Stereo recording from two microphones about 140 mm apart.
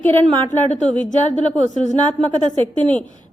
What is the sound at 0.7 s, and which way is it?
A woman's voice, 55° left (ahead or behind).